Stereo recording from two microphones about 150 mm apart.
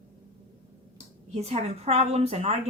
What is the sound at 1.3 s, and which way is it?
A woman's voice, 45° right (ahead or behind).